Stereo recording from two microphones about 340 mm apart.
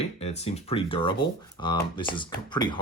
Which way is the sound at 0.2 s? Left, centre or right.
Centre.